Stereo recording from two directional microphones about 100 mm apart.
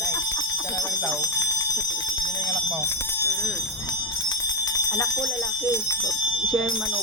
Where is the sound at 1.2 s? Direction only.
35° left (ahead or behind).